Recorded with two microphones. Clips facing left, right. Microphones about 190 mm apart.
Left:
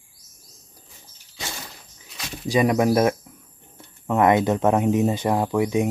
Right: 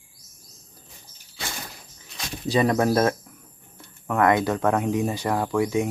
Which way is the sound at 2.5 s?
10° left (ahead or behind).